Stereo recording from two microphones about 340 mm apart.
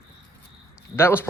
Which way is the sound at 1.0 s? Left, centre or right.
Centre.